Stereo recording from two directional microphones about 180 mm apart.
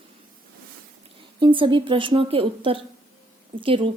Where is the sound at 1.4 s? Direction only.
25° right (ahead or behind).